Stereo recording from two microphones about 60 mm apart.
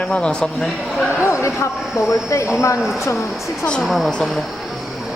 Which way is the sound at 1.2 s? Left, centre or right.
Left.